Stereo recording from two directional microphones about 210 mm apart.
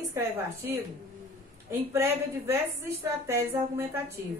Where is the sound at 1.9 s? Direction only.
10° right (ahead or behind).